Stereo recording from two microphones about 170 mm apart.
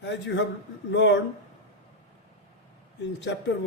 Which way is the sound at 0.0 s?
90° left.